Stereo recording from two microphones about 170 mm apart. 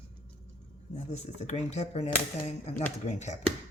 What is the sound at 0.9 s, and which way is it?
Speech, 40° left (ahead or behind).